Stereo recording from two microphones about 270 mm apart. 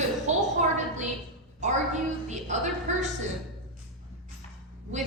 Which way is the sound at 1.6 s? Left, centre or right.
Right.